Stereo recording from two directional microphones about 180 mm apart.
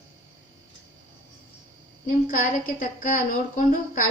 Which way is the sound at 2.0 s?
50° left (ahead or behind).